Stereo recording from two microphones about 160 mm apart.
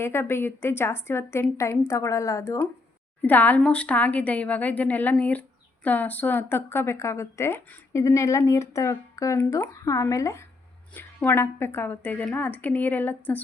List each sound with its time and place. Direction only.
0.0 s a woman's voice: 15° left (ahead or behind)